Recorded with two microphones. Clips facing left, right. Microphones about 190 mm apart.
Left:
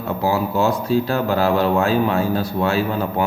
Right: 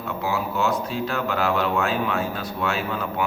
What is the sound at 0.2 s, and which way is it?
Speech, 35° left (ahead or behind).